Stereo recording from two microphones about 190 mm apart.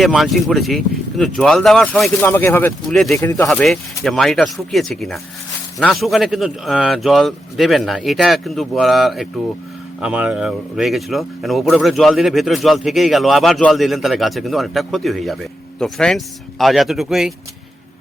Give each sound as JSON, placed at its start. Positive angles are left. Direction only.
{"t": 0.0, "sound": "speech", "side_deg": 0}
{"t": 3.2, "sound": "speech", "side_deg": 15}
{"t": 3.4, "sound": "speech", "side_deg": 0}